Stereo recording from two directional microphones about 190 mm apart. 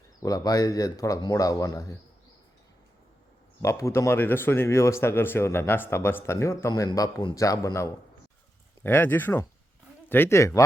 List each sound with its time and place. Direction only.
0.2 s a man's voice: 20° left (ahead or behind)
3.6 s speech: 15° left (ahead or behind)